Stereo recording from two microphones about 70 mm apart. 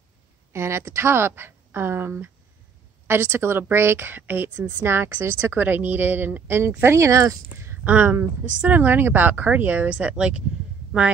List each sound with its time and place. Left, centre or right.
0.5 s a woman's voice: right
7.8 s speech: right